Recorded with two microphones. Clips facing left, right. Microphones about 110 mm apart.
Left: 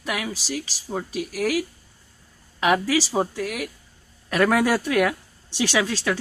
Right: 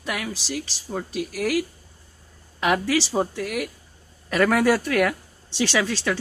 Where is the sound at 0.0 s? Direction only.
5° left (ahead or behind).